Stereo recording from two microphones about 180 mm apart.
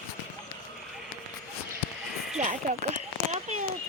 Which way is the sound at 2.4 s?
45° right (ahead or behind).